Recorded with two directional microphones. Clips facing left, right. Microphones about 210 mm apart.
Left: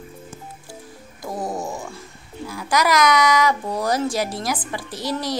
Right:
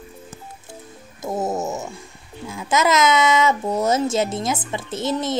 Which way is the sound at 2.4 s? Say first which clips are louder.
Right 1 dB; 25° right (ahead or behind).